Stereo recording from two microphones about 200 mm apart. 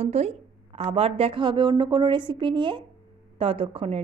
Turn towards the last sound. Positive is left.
turn(degrees=-30)  # may be behind; listen again after turning